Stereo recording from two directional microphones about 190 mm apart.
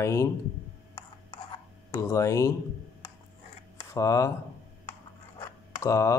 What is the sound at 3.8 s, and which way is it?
Speech, 20° left (ahead or behind).